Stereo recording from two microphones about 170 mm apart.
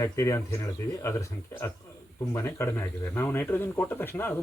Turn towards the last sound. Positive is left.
turn(degrees=15)  # may be behind; listen again after turning